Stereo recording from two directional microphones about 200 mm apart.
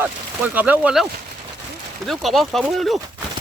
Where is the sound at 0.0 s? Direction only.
10° right (ahead or behind).